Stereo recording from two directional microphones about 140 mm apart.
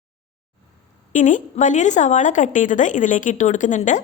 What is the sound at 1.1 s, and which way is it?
Speech, 65° left (ahead or behind).